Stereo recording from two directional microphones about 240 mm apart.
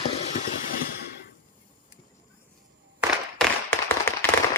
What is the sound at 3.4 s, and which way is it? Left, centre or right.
Tap, centre.